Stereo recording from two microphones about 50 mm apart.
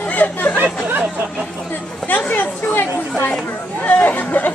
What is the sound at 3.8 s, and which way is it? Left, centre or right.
Chatter, left.